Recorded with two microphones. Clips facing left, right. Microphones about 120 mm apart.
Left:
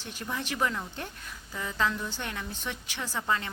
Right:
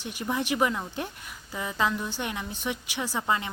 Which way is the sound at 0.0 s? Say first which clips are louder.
Right 6 dB; 15° right (ahead or behind).